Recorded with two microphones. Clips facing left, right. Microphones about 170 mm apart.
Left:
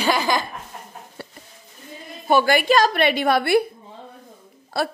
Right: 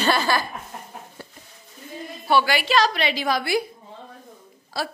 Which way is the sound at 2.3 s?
50° left (ahead or behind).